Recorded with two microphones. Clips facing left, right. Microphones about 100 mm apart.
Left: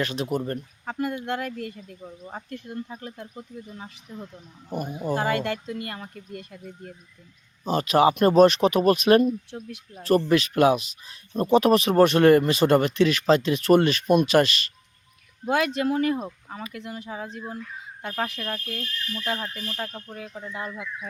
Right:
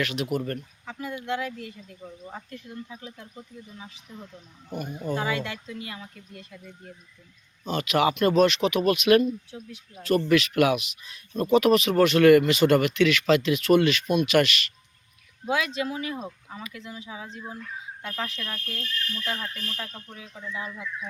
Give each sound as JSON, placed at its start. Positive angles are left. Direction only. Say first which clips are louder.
{"t": 0.0, "sound": "speech", "louder": "left 1 dB", "side_deg": 30}
{"t": 0.9, "sound": "speech", "louder": "left 3 dB", "side_deg": 55}
{"t": 5.1, "sound": "speech", "louder": "left 4 dB", "side_deg": 70}
{"t": 5.4, "sound": "speech", "louder": "left 5 dB", "side_deg": 55}
{"t": 7.6, "sound": "speech", "louder": "left 4 dB", "side_deg": 35}
{"t": 15.5, "sound": "speech", "louder": "left 5 dB", "side_deg": 55}
{"t": 18.0, "sound": "speech", "louder": "left 5 dB", "side_deg": 50}